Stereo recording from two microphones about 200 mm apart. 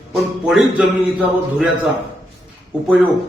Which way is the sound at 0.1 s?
Centre (ahead or behind).